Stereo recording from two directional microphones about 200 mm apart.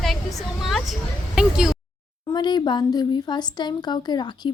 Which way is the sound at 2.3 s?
20° left (ahead or behind).